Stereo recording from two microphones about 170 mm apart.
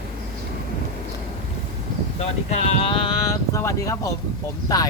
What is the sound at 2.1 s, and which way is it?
Speech, 35° left (ahead or behind).